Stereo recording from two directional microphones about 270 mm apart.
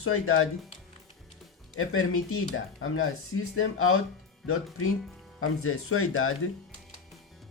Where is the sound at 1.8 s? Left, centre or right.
Left.